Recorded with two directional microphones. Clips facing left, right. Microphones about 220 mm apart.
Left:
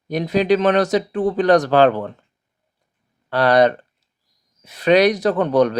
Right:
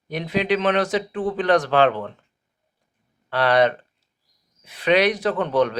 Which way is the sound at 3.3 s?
40° left (ahead or behind).